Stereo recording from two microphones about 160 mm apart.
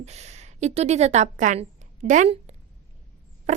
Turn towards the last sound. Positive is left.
turn(degrees=-45)  # may be behind; listen again after turning